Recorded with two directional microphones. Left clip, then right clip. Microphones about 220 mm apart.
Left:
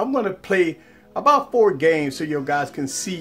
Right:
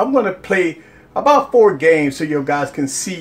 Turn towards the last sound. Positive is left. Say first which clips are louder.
# right 5 dB
turn(degrees=30)  # may be behind; listen again after turning